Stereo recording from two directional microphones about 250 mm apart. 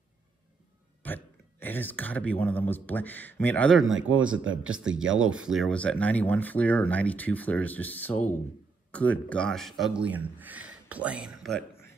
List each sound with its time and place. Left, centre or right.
1.0 s speech: centre
3.8 s speech: right
4.6 s a man's voice: centre
5.0 s speech: right
5.3 s a man's voice: centre